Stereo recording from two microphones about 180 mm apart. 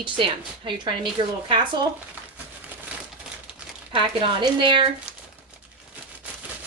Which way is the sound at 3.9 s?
30° right (ahead or behind).